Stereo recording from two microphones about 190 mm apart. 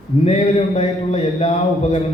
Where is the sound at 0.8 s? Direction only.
35° left (ahead or behind).